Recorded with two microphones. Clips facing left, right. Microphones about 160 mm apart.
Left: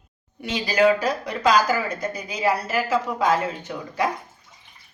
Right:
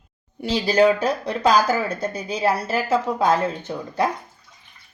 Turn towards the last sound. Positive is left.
turn(degrees=-30)  # may be behind; listen again after turning